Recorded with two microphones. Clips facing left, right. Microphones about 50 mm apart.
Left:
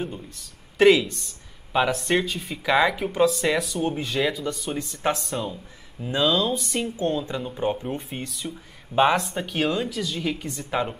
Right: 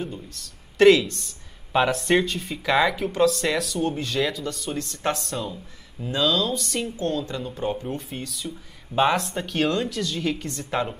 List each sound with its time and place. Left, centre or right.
0.1 s speech: centre
7.0 s a woman's voice: left; by 11.0 s centre